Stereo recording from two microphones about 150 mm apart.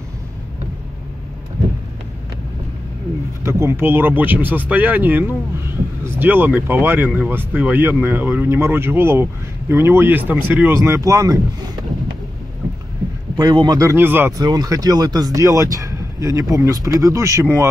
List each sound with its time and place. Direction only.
3.4 s speech: 15° right (ahead or behind)
13.4 s speech: 25° right (ahead or behind)
14.4 s speech: 25° right (ahead or behind)